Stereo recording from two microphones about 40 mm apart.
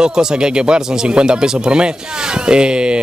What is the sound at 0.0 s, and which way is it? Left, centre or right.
Speech, centre.